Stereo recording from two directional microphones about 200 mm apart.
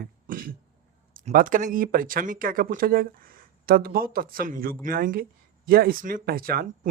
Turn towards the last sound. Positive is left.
turn(degrees=-45)  # may be behind; listen again after turning